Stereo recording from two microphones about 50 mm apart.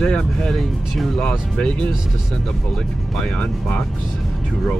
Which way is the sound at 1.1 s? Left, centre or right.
Centre.